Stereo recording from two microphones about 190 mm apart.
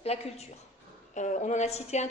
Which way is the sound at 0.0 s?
35° left (ahead or behind).